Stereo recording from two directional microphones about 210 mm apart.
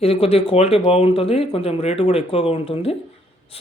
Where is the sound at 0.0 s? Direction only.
30° left (ahead or behind).